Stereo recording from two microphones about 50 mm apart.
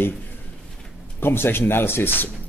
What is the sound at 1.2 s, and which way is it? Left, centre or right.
Speech, left.